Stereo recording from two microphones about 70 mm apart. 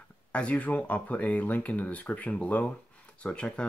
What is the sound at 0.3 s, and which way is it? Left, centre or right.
Speech, centre.